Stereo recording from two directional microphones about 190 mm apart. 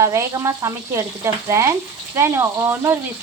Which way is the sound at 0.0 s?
15° right (ahead or behind).